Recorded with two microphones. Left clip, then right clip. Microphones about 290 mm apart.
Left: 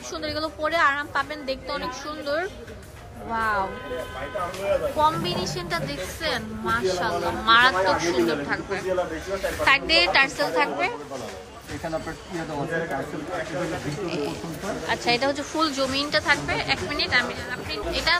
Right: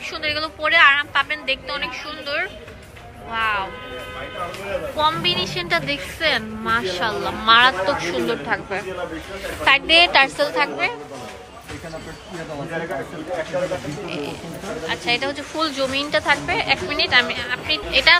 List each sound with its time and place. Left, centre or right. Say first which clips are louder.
0.2 s a woman's voice: right 4 dB; centre
4.9 s a woman's voice: right 3 dB; centre
14.9 s a woman's voice: right 1 dB; centre